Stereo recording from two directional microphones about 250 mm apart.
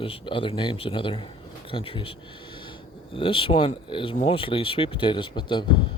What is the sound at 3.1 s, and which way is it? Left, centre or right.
Speech, left.